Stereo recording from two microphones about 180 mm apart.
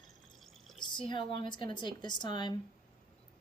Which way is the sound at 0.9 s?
25° left (ahead or behind).